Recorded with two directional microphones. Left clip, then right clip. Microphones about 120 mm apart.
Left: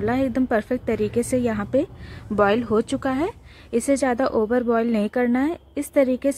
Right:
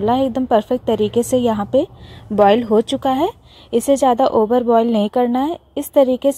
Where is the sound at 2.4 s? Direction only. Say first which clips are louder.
Right 7 dB; 30° right (ahead or behind).